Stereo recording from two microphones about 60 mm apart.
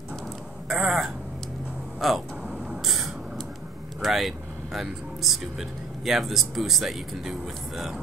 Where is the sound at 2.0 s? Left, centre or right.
Centre.